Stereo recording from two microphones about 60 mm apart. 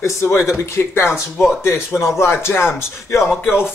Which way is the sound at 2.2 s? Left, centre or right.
Left.